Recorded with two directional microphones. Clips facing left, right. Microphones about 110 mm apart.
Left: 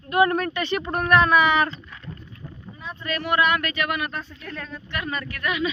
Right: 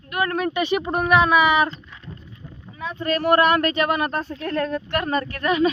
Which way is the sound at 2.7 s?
90° right.